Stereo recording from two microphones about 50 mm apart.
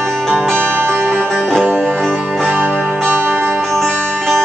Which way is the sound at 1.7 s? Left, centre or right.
Right.